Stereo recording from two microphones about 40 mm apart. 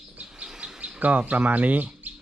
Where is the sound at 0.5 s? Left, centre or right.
Right.